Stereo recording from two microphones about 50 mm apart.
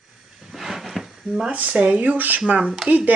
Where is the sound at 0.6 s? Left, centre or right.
Centre.